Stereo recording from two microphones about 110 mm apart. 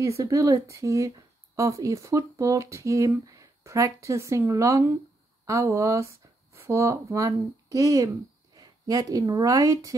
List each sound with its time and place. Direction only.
0.0 s speech: 30° right (ahead or behind)